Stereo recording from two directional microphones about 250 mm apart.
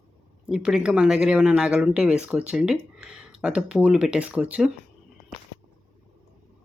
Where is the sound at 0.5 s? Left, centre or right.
Centre.